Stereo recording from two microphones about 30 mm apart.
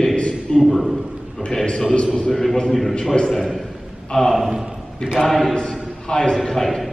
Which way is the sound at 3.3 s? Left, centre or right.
Centre.